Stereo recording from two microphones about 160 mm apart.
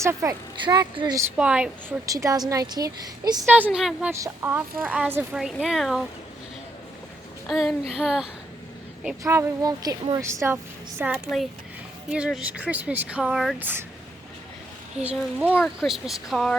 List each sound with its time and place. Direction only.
0.0 s speech: 20° right (ahead or behind)
1.4 s speech: 5° right (ahead or behind)
2.0 s speech: 20° right (ahead or behind)
3.5 s speech: 5° right (ahead or behind)
4.1 s speech: 15° right (ahead or behind); by 6.1 s centre (ahead or behind)
7.4 s speech: centre (ahead or behind)
9.2 s speech: 20° right (ahead or behind)
14.9 s speech: 5° right (ahead or behind)
15.4 s speech: 5° left (ahead or behind)